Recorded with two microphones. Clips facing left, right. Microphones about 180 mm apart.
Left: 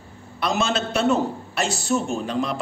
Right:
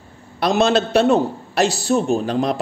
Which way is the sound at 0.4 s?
35° right (ahead or behind).